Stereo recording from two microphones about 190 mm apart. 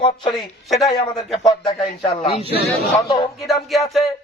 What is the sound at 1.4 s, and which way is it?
A man's voice, 25° left (ahead or behind).